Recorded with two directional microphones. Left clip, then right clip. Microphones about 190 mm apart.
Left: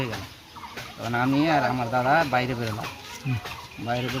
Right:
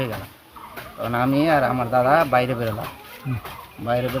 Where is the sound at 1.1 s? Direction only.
15° right (ahead or behind).